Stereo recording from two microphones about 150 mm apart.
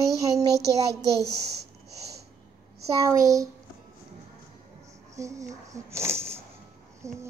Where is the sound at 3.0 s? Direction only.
20° right (ahead or behind).